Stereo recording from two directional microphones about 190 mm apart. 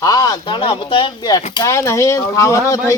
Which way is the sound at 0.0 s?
20° left (ahead or behind).